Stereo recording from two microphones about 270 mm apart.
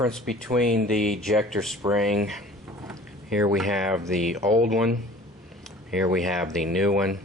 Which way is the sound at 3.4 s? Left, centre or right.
Centre.